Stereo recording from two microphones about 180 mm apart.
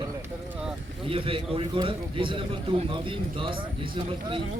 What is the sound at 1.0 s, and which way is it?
A man's voice, 30° right (ahead or behind).